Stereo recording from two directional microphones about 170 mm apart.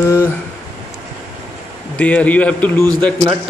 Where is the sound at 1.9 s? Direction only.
10° left (ahead or behind).